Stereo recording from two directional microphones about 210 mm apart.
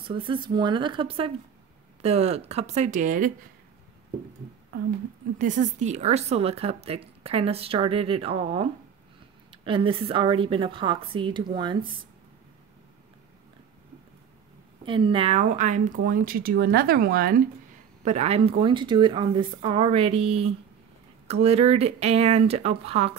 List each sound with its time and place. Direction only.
0.1 s a woman's voice: 25° right (ahead or behind)
5.4 s a woman's voice: 35° right (ahead or behind)
14.9 s a woman's voice: 25° right (ahead or behind); by 17.4 s 45° right (ahead or behind)
18.0 s a woman's voice: 30° right (ahead or behind)